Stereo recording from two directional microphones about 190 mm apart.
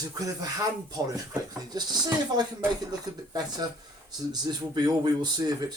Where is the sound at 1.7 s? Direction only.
20° right (ahead or behind).